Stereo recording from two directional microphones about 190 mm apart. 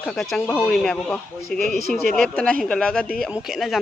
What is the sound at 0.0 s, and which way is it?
Speech, centre (ahead or behind).